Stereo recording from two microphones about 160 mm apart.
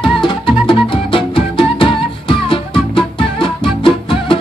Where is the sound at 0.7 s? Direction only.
35° left (ahead or behind).